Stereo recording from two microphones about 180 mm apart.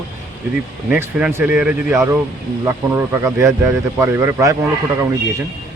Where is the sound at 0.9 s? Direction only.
10° right (ahead or behind).